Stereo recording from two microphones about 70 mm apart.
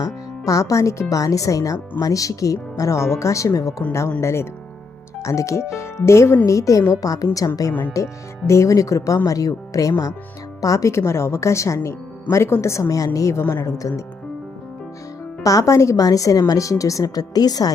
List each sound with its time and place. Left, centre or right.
0.0 s a woman's voice: left
7.7 s speech: left
7.9 s speech: left
15.4 s a woman's voice: left